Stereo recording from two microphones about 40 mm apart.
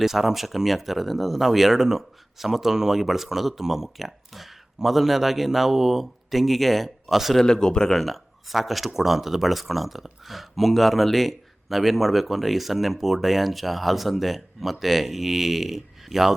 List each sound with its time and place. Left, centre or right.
0.0 s speech: centre
7.3 s speech: centre
7.9 s speech: centre